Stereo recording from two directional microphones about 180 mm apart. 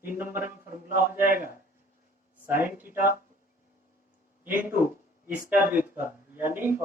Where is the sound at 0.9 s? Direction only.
50° right (ahead or behind).